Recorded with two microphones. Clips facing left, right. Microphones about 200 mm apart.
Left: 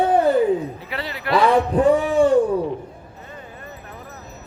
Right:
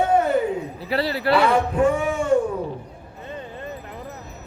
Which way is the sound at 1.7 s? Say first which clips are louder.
Left 4 dB; 35° left (ahead or behind).